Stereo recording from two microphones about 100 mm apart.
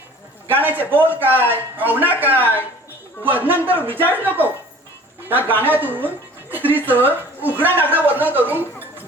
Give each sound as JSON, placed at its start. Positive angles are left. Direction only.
{"t": 0.4, "sound": "speech", "side_deg": -20}